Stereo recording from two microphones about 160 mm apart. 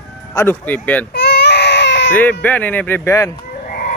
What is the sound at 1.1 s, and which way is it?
Baby cry, 90° left.